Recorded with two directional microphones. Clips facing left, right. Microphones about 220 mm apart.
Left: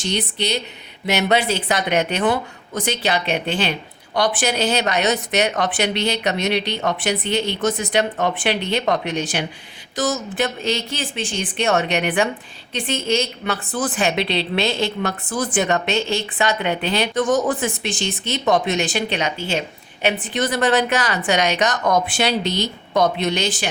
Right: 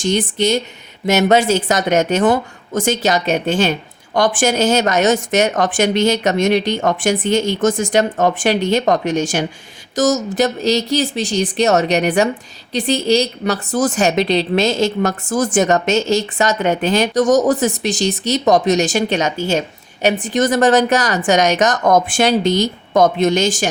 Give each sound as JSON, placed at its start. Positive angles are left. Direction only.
{"t": 0.0, "sound": "a woman's voice", "side_deg": -45}